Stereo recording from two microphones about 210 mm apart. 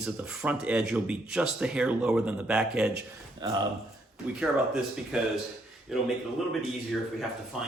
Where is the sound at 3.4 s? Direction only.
20° right (ahead or behind).